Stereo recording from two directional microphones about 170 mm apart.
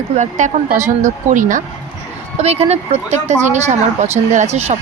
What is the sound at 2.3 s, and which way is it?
Speech, 35° right (ahead or behind).